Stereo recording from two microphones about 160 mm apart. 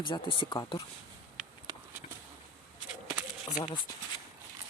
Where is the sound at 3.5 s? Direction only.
25° left (ahead or behind).